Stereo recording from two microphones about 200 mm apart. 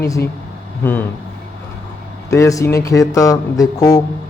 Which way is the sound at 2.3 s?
15° left (ahead or behind).